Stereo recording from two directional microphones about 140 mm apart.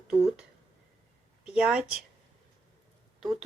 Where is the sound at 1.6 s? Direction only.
5° right (ahead or behind).